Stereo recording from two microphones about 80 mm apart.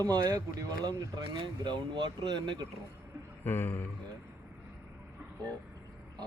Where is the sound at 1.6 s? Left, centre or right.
Right.